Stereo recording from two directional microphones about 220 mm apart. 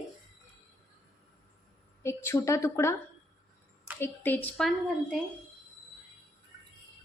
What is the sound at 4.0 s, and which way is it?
Speech, 10° left (ahead or behind).